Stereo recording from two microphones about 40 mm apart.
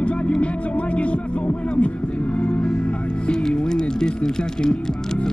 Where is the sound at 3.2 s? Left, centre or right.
Left.